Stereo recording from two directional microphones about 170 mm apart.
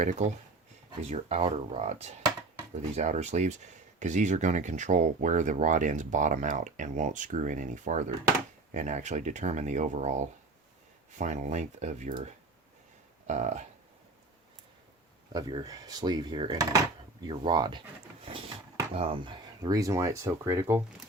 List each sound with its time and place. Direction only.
0.0 s speech: 45° right (ahead or behind)
13.2 s speech: 45° right (ahead or behind)
15.3 s speech: 25° right (ahead or behind)
18.3 s a sound: 30° right (ahead or behind)
18.9 s speech: 30° right (ahead or behind); by 20.8 s 15° right (ahead or behind)